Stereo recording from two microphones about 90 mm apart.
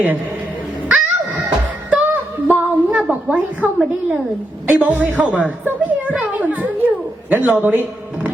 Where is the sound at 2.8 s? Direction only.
10° right (ahead or behind).